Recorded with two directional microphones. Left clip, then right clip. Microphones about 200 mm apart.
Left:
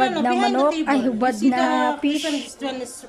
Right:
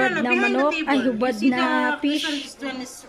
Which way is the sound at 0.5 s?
Centre (ahead or behind).